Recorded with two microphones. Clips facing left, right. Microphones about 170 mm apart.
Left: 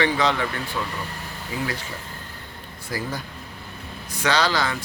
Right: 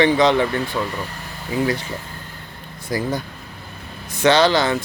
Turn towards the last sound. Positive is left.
turn(degrees=-25)  # may be behind; listen again after turning